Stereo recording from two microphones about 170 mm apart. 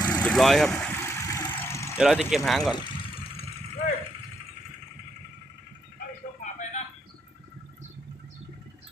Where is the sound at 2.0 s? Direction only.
5° right (ahead or behind).